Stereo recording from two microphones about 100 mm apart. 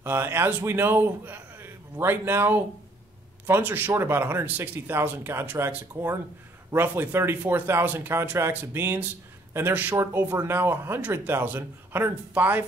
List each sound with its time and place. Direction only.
0.0 s a man's voice: 20° right (ahead or behind)